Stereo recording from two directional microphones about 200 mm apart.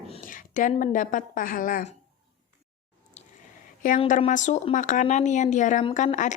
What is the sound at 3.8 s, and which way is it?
A woman's voice, 40° left (ahead or behind).